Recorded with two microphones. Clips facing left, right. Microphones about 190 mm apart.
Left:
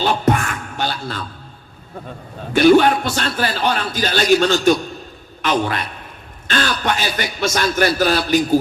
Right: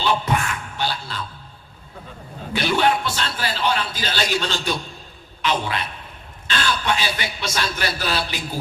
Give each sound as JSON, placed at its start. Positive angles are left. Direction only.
{"t": 0.0, "sound": "music", "side_deg": 50}
{"t": 2.5, "sound": "a man's voice", "side_deg": 50}